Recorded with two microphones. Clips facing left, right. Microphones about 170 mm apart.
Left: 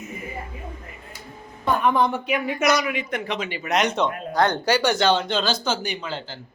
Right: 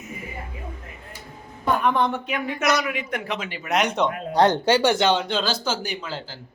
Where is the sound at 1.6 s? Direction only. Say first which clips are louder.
Left 1 dB; centre (ahead or behind).